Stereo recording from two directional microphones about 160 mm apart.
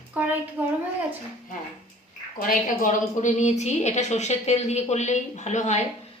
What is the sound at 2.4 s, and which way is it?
A woman's voice, 55° left (ahead or behind).